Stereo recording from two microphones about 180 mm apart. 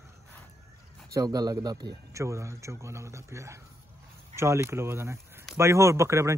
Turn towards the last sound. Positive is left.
turn(degrees=-15)  # may be behind; listen again after turning